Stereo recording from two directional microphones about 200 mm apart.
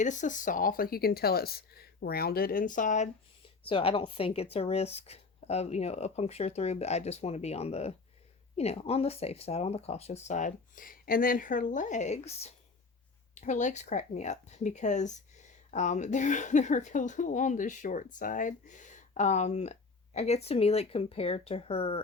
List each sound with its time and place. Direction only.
0.0 s speech: 40° left (ahead or behind)
3.7 s speech: 25° left (ahead or behind)